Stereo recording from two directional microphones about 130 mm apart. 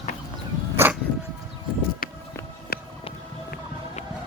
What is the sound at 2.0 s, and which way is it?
Music, 90° left.